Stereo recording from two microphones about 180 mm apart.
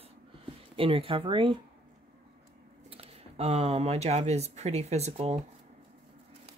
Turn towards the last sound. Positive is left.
turn(degrees=-35)  # may be behind; listen again after turning